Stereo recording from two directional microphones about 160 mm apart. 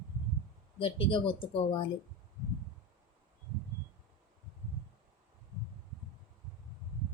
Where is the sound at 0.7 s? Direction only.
30° left (ahead or behind).